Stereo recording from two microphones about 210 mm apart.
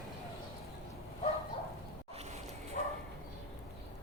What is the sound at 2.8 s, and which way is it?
Bow-wow, 40° left (ahead or behind).